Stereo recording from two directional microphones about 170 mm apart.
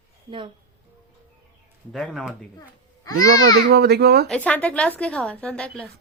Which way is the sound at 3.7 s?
70° right (ahead or behind).